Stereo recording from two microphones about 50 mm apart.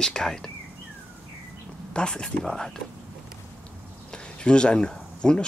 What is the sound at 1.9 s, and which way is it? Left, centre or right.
Speech, centre.